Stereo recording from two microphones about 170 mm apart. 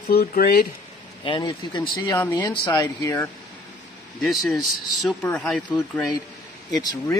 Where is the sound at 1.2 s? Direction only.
25° left (ahead or behind).